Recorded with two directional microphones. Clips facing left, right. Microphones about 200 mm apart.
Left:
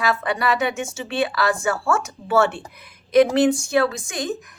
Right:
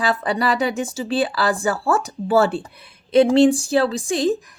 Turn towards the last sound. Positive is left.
turn(degrees=-30)  # may be behind; listen again after turning